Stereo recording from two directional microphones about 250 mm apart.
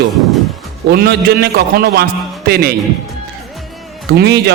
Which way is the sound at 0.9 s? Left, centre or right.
Right.